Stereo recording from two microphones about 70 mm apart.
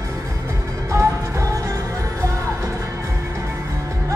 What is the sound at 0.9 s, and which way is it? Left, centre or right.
Music, right.